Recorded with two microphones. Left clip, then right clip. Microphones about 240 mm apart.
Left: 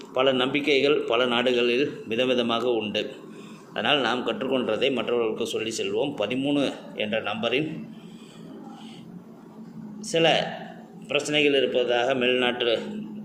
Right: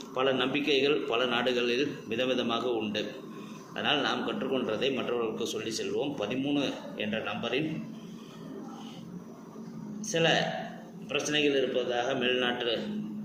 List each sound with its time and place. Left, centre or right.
0.1 s a man's voice: left
10.1 s a man's voice: left